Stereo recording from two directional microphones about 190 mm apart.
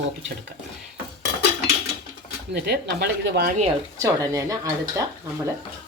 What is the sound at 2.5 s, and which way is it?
A woman's voice, 60° right (ahead or behind).